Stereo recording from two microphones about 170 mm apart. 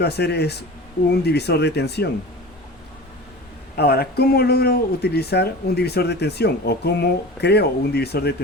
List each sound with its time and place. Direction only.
0.0 s speech: 75° left (ahead or behind)
3.8 s speech: 70° left (ahead or behind)